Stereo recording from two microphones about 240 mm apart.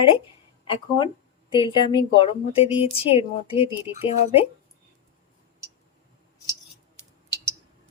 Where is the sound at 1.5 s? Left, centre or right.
Centre.